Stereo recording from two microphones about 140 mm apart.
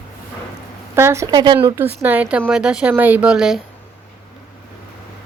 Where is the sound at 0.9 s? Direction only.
20° right (ahead or behind).